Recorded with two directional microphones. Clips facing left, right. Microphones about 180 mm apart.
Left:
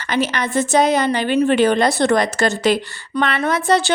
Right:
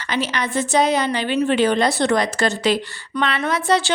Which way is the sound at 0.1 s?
50° left (ahead or behind).